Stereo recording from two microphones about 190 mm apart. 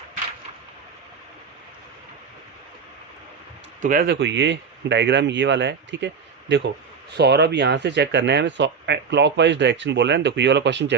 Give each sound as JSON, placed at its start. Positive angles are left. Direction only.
{"t": 3.8, "sound": "speech", "side_deg": -45}
{"t": 7.1, "sound": "speech", "side_deg": -60}